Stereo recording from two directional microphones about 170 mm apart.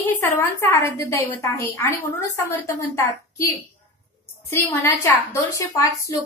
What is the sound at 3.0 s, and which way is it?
A woman's voice, 15° left (ahead or behind).